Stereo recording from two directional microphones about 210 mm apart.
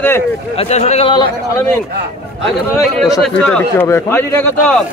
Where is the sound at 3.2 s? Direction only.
5° left (ahead or behind).